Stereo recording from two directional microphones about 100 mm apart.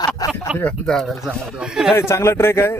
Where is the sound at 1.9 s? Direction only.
25° left (ahead or behind).